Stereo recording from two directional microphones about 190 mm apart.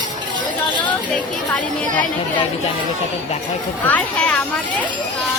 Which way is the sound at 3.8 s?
10° left (ahead or behind).